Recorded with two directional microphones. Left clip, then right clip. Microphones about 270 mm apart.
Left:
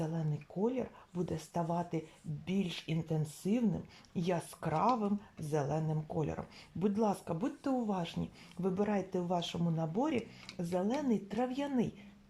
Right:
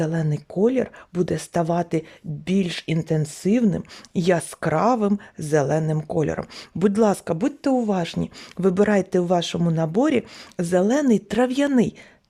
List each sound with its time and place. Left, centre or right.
0.0 s speech: right